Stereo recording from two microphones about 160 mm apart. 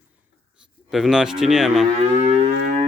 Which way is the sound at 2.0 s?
45° right (ahead or behind).